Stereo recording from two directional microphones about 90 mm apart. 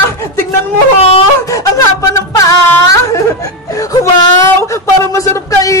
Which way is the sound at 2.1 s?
35° left (ahead or behind).